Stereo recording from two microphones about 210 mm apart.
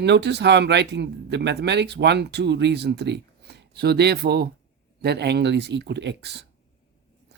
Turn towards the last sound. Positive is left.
turn(degrees=-55)  # may be behind; listen again after turning